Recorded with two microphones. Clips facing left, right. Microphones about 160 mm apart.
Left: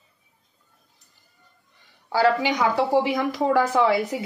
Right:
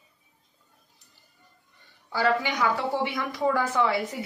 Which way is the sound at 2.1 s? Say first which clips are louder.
Left 5 dB; 90° left.